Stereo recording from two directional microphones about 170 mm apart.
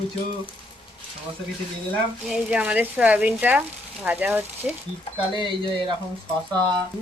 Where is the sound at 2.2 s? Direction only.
5° right (ahead or behind).